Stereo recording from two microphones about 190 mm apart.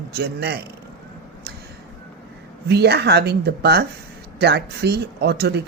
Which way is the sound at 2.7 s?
60° right (ahead or behind).